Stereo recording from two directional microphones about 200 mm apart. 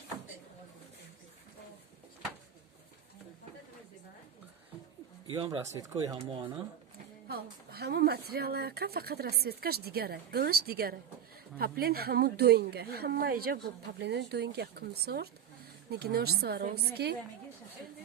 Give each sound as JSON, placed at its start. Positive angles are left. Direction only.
{"t": 5.4, "sound": "speech", "side_deg": -20}
{"t": 7.7, "sound": "speech", "side_deg": -55}